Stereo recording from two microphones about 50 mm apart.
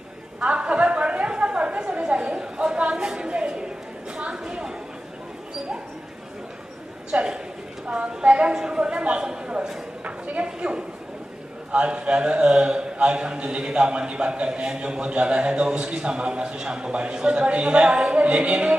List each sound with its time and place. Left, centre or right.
0.4 s chatter: right
2.9 s a woman's voice: centre
4.2 s a sound: centre
7.1 s a man's voice: centre